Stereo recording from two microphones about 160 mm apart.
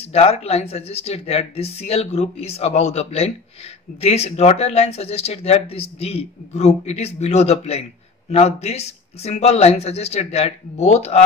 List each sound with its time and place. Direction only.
0.1 s speech: 40° left (ahead or behind)